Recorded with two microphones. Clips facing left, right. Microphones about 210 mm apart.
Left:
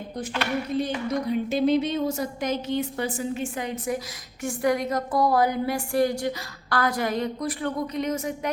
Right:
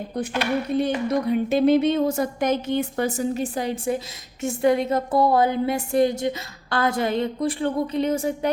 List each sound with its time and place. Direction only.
0.8 s a woman's voice: 60° right (ahead or behind); by 8.5 s 30° right (ahead or behind)